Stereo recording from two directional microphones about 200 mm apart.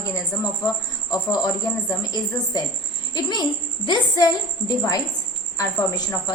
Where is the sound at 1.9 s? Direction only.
20° left (ahead or behind).